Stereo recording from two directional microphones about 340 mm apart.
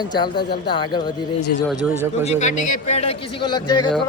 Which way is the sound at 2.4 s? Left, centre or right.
Left.